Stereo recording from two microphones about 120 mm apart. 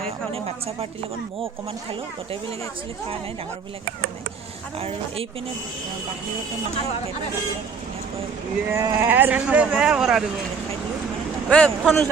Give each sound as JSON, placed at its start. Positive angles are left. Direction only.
{"t": 0.3, "sound": "a woman's voice", "side_deg": -55}
{"t": 4.8, "sound": "a woman's voice", "side_deg": -55}
{"t": 8.7, "sound": "speech", "side_deg": -25}
{"t": 11.4, "sound": "a man's voice", "side_deg": 5}